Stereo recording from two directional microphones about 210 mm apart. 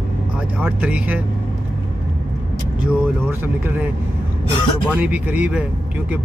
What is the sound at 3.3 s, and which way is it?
Speech, 10° right (ahead or behind).